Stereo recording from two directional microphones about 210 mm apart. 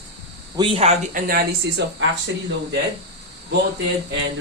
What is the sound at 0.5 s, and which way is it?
Speech, 25° right (ahead or behind).